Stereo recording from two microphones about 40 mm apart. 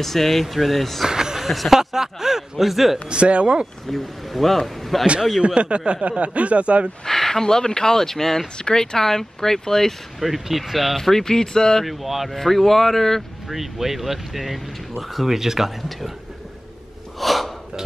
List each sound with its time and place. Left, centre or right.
0.0 s speech: centre
1.0 s a sound: centre
1.5 s speech: centre
1.8 s speech: centre
3.1 s speech: right
3.9 s speech: centre
5.4 s speech: right
7.1 s speech: centre
8.5 s speech: centre
10.2 s speech: centre
11.0 s speech: centre
11.8 s speech: centre
13.5 s speech: centre
17.2 s gasp: centre